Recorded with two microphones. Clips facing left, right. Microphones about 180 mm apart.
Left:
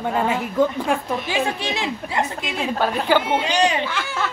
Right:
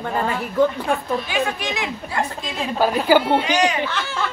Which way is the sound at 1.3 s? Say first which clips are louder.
Even; 30° left (ahead or behind).